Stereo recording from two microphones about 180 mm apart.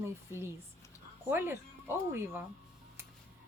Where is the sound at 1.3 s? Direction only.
10° right (ahead or behind).